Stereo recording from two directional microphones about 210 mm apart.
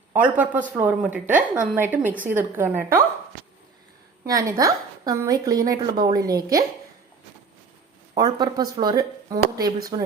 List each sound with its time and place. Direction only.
0.1 s a woman's voice: 10° right (ahead or behind)
4.3 s a woman's voice: 15° right (ahead or behind)
8.1 s speech: 20° right (ahead or behind)